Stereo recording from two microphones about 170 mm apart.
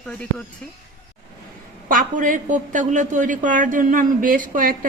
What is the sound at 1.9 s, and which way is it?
A woman's voice, 50° right (ahead or behind).